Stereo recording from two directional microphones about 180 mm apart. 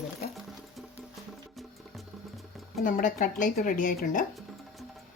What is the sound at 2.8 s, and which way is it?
A woman's voice, 50° left (ahead or behind).